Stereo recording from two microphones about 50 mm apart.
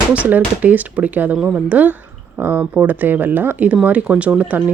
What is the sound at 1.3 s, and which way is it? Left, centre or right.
Speech, centre.